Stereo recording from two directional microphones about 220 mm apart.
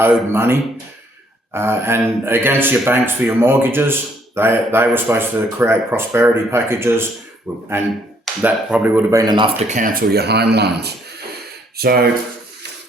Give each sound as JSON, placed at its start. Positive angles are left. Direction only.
{"t": 0.0, "sound": "speech", "side_deg": -10}
{"t": 9.6, "sound": "speech", "side_deg": -35}